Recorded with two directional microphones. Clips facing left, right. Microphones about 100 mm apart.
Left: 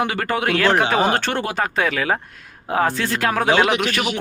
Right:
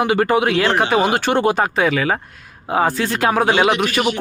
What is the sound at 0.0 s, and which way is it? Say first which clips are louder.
A man's voice: right 6 dB; 15° right (ahead or behind).